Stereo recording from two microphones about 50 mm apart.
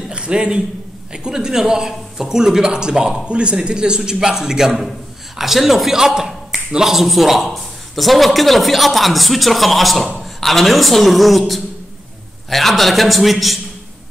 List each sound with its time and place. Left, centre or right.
0.1 s a man's voice: centre